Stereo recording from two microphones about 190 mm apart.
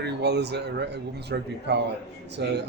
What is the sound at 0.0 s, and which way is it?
Speech, 60° right (ahead or behind).